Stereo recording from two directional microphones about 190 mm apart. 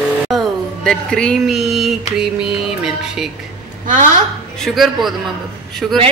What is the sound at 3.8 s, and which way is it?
Speech, 45° right (ahead or behind).